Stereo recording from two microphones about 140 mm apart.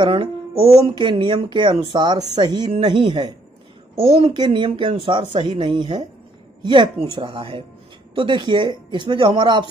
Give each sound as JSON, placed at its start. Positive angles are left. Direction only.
{"t": 0.0, "sound": "speech", "side_deg": -35}
{"t": 3.9, "sound": "speech", "side_deg": -45}